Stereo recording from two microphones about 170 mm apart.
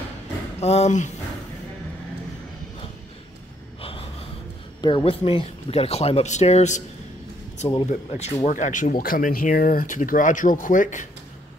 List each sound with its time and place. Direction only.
0.6 s speech: 40° left (ahead or behind)
3.8 s gasp: 35° left (ahead or behind)
4.8 s speech: 30° left (ahead or behind)
7.9 s speech: 45° left (ahead or behind)